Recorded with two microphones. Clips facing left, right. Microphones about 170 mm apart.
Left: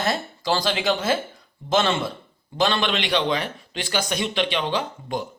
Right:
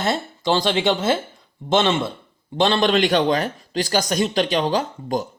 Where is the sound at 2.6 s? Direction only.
35° right (ahead or behind).